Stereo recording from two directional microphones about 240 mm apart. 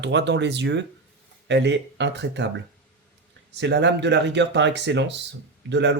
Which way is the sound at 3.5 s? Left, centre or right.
Right.